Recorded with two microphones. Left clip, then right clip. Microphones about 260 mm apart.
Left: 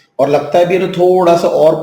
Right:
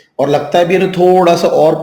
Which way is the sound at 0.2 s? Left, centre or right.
Right.